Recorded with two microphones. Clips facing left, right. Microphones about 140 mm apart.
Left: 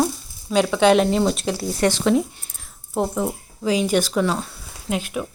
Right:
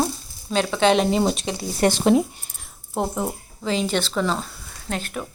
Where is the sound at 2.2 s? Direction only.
Centre (ahead or behind).